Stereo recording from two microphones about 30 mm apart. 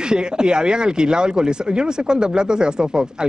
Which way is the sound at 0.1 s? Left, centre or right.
Right.